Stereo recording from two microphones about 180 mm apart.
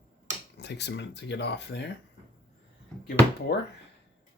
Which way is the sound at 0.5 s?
70° left (ahead or behind).